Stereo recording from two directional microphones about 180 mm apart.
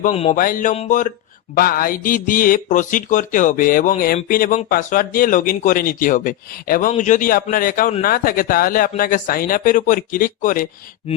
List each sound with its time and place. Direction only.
0.1 s a sound: 35° left (ahead or behind)
0.3 s speech: 50° left (ahead or behind)
1.5 s speech: 55° left (ahead or behind)